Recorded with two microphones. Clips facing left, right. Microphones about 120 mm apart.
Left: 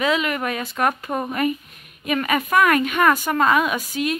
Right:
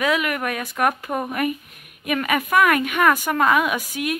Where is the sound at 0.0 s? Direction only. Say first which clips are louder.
Even; 5° right (ahead or behind).